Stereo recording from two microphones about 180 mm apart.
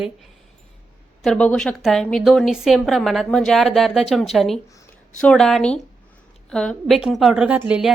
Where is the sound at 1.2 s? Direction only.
5° left (ahead or behind).